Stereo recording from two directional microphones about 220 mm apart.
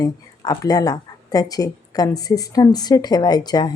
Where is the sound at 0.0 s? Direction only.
15° left (ahead or behind).